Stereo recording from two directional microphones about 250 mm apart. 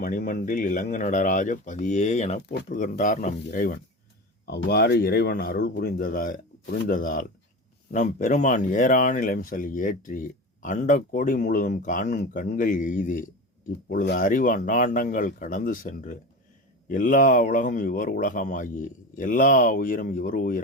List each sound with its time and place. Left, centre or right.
0.0 s speech: left
2.4 s speech: left